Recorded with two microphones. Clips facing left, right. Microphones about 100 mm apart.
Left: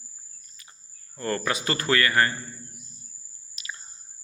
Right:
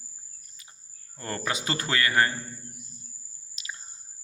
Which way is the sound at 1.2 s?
20° right (ahead or behind).